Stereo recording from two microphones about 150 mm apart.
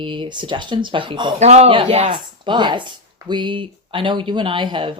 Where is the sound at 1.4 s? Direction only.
50° right (ahead or behind).